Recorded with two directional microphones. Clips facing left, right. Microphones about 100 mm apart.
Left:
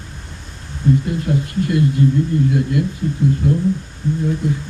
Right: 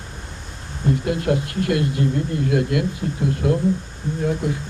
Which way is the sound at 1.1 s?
60° right (ahead or behind).